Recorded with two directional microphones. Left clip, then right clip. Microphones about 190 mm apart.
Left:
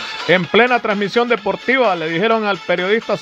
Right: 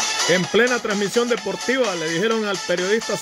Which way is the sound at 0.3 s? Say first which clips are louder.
Left 7 dB; 30° left (ahead or behind).